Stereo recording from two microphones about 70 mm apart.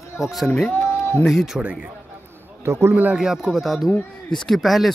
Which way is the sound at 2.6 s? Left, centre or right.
Right.